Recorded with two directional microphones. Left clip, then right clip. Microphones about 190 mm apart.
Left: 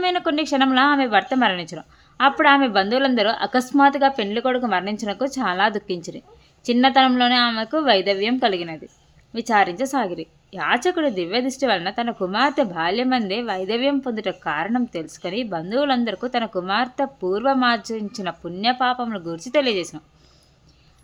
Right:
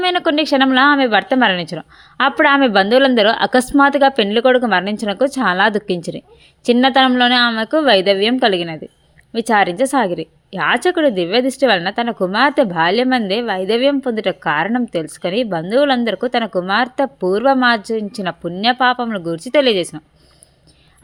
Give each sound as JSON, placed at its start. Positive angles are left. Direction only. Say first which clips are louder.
{"t": 0.0, "sound": "a woman's voice", "louder": "right 6 dB", "side_deg": -25}